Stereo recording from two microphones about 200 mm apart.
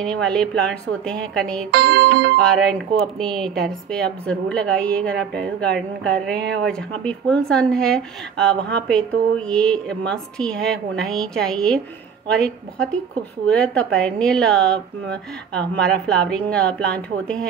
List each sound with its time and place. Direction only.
0.0 s a woman's voice: 5° left (ahead or behind)
1.7 s music: 50° right (ahead or behind)
2.4 s a woman's voice: 5° left (ahead or behind)